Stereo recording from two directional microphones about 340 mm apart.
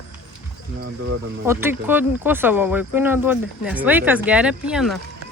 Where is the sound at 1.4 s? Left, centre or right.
Centre.